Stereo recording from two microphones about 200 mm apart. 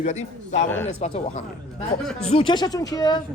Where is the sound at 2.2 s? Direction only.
30° left (ahead or behind).